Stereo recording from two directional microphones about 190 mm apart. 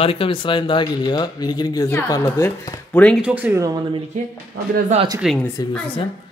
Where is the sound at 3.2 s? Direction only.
5° right (ahead or behind).